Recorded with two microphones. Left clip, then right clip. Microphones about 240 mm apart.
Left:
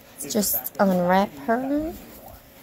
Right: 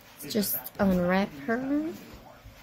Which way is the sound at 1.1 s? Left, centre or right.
Centre.